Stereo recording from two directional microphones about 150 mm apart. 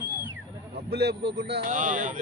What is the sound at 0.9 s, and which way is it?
Speech, 90° right.